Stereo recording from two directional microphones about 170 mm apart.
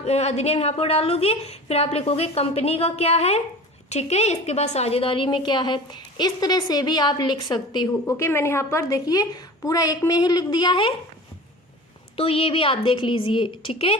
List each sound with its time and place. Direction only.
0.0 s a woman's voice: 40° left (ahead or behind)
12.1 s a woman's voice: 35° left (ahead or behind)